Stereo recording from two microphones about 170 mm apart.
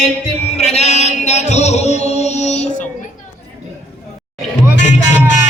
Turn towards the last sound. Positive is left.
turn(degrees=45)  # may be behind; listen again after turning